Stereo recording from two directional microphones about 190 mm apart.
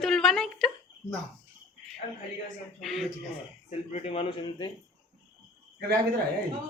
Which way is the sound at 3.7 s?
35° left (ahead or behind).